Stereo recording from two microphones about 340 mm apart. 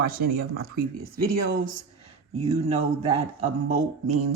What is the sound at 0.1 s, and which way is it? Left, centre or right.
Speech, right.